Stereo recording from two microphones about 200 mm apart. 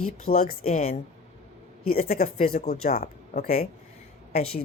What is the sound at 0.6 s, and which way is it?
Speech, 30° left (ahead or behind).